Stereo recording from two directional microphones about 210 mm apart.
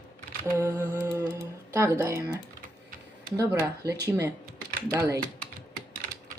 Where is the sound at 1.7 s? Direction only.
15° right (ahead or behind).